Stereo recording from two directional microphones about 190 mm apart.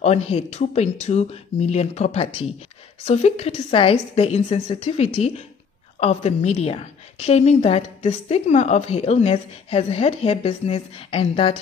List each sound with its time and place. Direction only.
0.0 s a woman's voice: 35° left (ahead or behind)